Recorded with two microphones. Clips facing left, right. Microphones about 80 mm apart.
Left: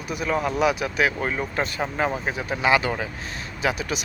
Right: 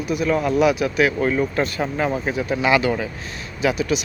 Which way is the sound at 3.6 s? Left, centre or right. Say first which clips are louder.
Right 5 dB; left.